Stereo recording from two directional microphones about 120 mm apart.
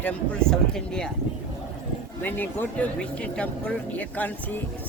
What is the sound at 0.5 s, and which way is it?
Speech, 5° left (ahead or behind).